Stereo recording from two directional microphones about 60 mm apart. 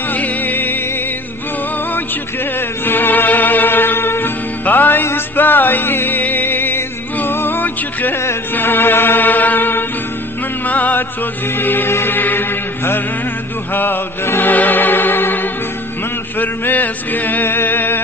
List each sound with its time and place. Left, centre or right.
0.1 s music: left
2.8 s music: left
16.3 s male singing: left